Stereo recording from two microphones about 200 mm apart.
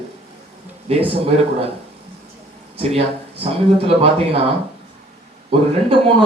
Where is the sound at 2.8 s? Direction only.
30° right (ahead or behind).